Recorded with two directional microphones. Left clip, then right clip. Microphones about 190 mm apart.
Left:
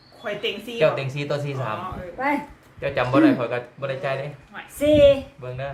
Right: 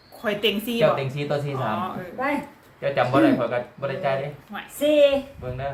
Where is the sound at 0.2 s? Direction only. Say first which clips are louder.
Right 4 dB; 65° right (ahead or behind).